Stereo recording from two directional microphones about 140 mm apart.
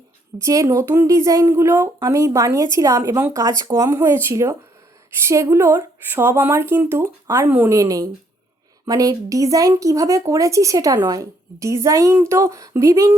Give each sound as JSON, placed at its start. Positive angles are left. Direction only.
{"t": 0.3, "sound": "speech", "side_deg": -20}